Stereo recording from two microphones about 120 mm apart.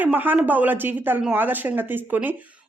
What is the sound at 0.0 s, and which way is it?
A woman's voice, 15° right (ahead or behind).